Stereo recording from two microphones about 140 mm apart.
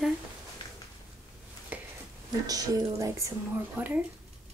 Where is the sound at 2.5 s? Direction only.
25° right (ahead or behind).